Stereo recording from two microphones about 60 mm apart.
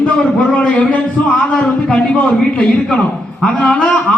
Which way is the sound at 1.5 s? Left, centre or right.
Centre.